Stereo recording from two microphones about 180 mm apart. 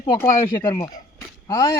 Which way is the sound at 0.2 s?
15° left (ahead or behind).